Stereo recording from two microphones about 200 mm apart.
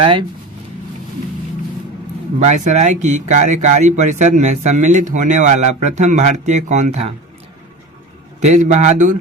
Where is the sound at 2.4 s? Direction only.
35° right (ahead or behind).